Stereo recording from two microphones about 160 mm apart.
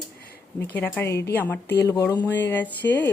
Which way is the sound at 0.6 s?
10° left (ahead or behind).